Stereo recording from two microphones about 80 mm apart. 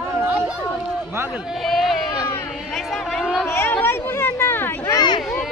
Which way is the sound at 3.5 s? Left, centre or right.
Left.